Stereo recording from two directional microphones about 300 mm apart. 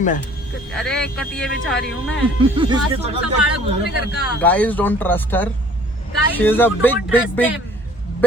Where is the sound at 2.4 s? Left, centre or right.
Centre.